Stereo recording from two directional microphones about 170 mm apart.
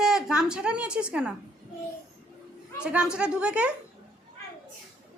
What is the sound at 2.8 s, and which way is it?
Speech, 5° right (ahead or behind).